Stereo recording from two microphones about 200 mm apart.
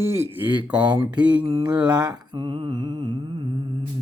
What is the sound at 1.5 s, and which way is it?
Mantra, 25° right (ahead or behind).